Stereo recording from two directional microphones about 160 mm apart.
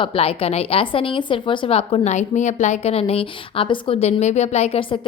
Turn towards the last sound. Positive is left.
turn(degrees=35)  # may be behind; listen again after turning